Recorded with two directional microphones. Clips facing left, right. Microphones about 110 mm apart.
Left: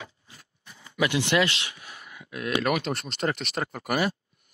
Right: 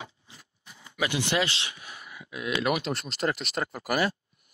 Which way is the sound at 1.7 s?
15° right (ahead or behind).